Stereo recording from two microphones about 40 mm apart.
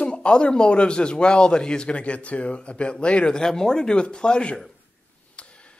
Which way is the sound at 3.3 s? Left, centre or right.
Centre.